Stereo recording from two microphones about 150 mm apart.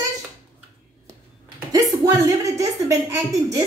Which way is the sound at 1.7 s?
25° right (ahead or behind).